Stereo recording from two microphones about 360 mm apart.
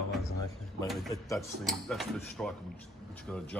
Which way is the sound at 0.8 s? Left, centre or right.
Centre.